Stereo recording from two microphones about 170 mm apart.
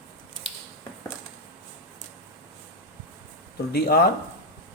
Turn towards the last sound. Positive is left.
turn(degrees=70)  # may be behind; listen again after turning